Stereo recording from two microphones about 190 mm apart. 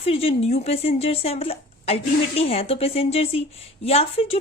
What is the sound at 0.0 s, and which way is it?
Speech, 30° left (ahead or behind).